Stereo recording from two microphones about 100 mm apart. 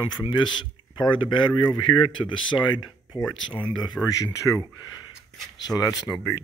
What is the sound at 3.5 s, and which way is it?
Speech, 55° left (ahead or behind).